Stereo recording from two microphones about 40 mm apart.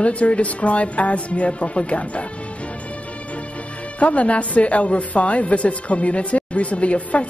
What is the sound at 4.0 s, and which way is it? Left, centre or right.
A woman's voice, left.